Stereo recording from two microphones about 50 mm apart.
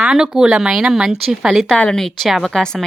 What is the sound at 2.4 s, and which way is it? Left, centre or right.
Speech, centre.